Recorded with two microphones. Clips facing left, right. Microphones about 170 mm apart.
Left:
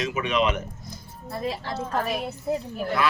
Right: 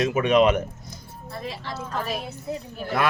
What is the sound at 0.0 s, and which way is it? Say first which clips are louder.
Speech: right 6 dB; 50° right (ahead or behind).